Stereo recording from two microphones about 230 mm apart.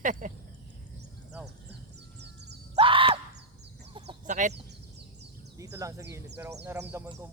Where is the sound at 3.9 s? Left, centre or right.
Right.